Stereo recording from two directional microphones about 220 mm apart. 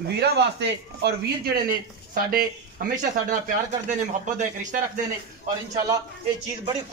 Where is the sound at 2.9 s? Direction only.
35° right (ahead or behind).